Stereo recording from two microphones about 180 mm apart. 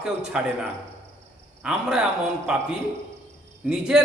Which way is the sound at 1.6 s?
5° right (ahead or behind).